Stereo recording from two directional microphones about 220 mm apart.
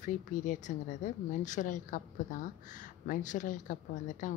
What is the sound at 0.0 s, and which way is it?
A woman's voice, 35° left (ahead or behind).